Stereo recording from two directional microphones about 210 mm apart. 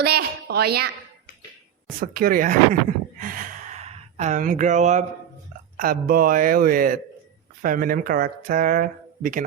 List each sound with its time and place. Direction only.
0.0 s a woman's voice: 50° right (ahead or behind)
2.0 s speech: 45° right (ahead or behind)
3.2 s gasp: 40° right (ahead or behind)
5.7 s speech: 40° right (ahead or behind)